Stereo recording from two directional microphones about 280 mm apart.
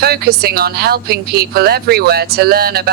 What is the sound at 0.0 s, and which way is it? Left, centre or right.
Speech, right.